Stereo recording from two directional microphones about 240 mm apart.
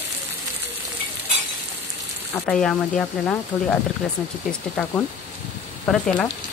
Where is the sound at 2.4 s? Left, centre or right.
Centre.